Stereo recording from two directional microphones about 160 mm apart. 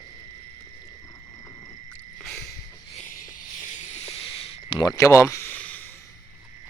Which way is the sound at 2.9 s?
50° left (ahead or behind).